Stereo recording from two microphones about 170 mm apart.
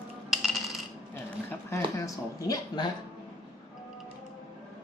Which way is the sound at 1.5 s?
15° left (ahead or behind).